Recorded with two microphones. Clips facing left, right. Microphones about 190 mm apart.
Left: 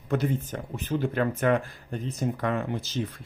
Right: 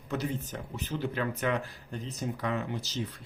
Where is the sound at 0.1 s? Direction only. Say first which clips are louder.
Left 6 dB; 55° left (ahead or behind).